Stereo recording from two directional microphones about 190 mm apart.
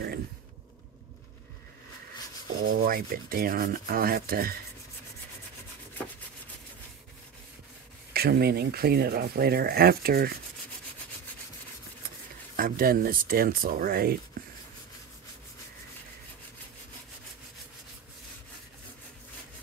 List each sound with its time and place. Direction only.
2.6 s rub: 50° right (ahead or behind)
8.1 s speech: 55° right (ahead or behind)
12.5 s rub: 50° right (ahead or behind)